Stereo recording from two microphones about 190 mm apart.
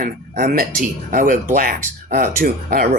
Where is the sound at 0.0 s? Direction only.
50° right (ahead or behind).